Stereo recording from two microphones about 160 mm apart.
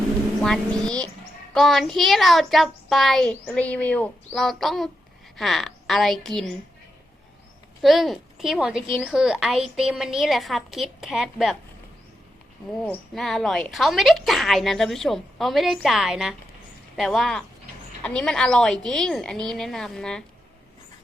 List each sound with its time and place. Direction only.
0.4 s a woman's voice: 5° left (ahead or behind)
7.8 s a woman's voice: centre (ahead or behind)
13.1 s a woman's voice: centre (ahead or behind)